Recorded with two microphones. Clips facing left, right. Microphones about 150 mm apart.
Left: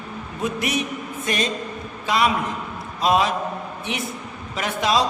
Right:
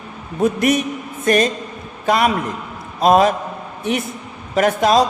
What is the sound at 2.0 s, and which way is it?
A man's voice, 50° right (ahead or behind).